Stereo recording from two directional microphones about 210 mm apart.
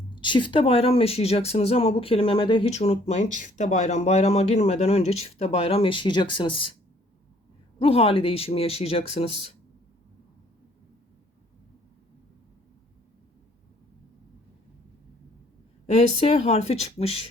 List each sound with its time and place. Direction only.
0.2 s speech: 20° left (ahead or behind)
7.8 s speech: 25° left (ahead or behind)
15.9 s speech: 30° left (ahead or behind)